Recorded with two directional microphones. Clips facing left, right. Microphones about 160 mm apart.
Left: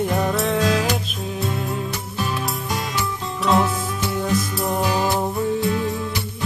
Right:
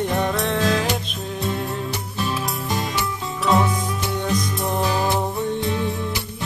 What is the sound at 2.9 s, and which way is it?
Music, centre (ahead or behind).